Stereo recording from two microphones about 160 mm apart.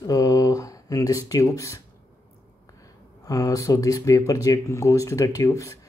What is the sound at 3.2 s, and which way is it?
Speech, 20° left (ahead or behind).